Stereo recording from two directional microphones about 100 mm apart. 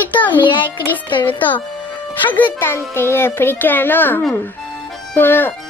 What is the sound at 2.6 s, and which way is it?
A child's voice, 25° left (ahead or behind).